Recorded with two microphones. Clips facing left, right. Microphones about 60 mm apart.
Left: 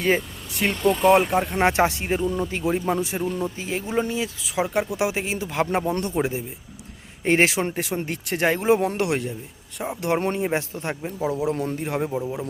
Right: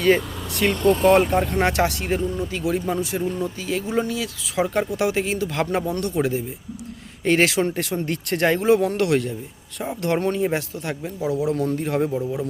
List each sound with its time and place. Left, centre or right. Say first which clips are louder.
0.9 s speech: right 1 dB; centre
1.5 s a man's voice: left 1 dB; left
2.4 s a man's voice: even; left
4.5 s speech: right 2 dB; centre
5.8 s a man's voice: right 1 dB; left
10.2 s a man's voice: right 2 dB; left
11.8 s speech: right 3 dB; centre